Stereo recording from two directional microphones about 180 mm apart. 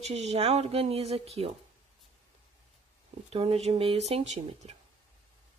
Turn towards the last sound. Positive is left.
turn(degrees=-35)  # may be behind; listen again after turning